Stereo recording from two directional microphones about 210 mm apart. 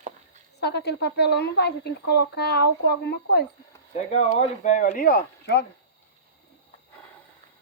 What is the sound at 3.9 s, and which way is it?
Speech, 30° left (ahead or behind).